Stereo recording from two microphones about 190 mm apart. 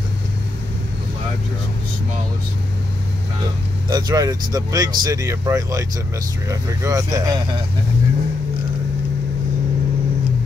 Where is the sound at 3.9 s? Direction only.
20° right (ahead or behind).